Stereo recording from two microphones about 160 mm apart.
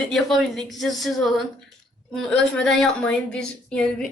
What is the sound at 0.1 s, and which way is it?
A woman's voice, centre (ahead or behind).